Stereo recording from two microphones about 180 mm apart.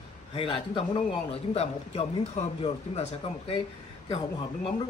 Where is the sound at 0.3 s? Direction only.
30° left (ahead or behind).